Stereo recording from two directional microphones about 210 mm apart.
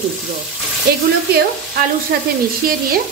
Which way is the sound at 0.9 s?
45° right (ahead or behind).